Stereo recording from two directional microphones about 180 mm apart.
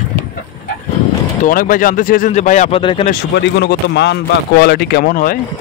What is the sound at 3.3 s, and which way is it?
Speech, 65° left (ahead or behind).